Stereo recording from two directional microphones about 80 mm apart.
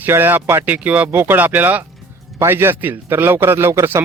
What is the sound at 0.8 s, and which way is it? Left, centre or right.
Speech, centre.